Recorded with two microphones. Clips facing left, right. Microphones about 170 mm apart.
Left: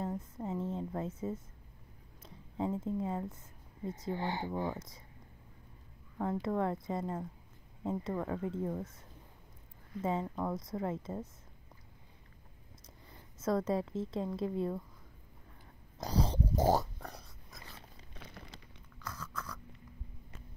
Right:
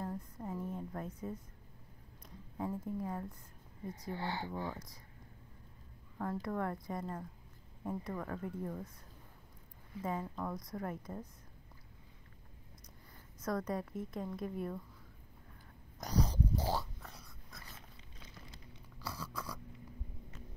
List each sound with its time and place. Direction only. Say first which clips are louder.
0.0 s a woman's voice: left 4 dB; 20° left (ahead or behind)
6.1 s a woman's voice: left 4 dB; 20° left (ahead or behind)
10.0 s a woman's voice: left 5 dB; 20° left (ahead or behind)
13.4 s a woman's voice: left 5 dB; 25° left (ahead or behind)
16.0 s pig: left 2 dB; 30° left (ahead or behind)
16.5 s dog: left 8 dB; 45° left (ahead or behind)
18.1 s a sound: left 5 dB; 65° left (ahead or behind)
18.9 s a sound: right 1 dB; 10° right (ahead or behind)